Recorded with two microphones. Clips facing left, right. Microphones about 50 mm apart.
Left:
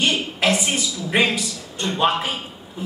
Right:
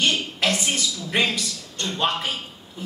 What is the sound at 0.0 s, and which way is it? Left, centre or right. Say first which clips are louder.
A woman's voice: left 2 dB; centre.